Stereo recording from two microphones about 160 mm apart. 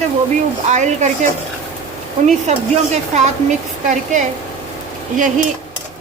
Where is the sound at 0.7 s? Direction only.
50° right (ahead or behind).